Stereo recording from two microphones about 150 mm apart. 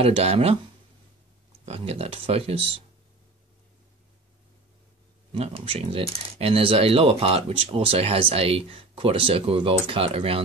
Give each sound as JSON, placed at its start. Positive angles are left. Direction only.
{"t": 0.0, "sound": "speech", "side_deg": -40}
{"t": 1.7, "sound": "speech", "side_deg": -40}
{"t": 5.3, "sound": "speech", "side_deg": -40}